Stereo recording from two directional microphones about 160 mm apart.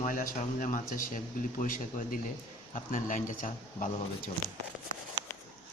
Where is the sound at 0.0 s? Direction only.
55° left (ahead or behind).